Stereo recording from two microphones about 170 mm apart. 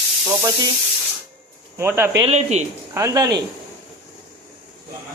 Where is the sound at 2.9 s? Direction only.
20° right (ahead or behind).